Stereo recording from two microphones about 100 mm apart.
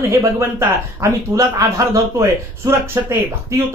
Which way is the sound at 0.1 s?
30° right (ahead or behind).